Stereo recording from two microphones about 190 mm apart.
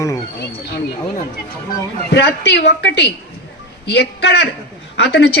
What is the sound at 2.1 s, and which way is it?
Speech, 60° left (ahead or behind).